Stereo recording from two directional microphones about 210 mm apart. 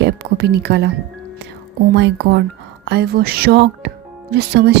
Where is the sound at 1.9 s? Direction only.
55° right (ahead or behind).